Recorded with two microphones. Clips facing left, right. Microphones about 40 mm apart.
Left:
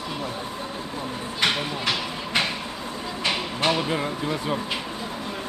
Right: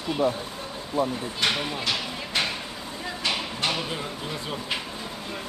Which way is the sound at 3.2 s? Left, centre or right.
Left.